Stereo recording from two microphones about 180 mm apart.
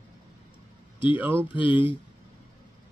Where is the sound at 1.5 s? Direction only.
30° left (ahead or behind).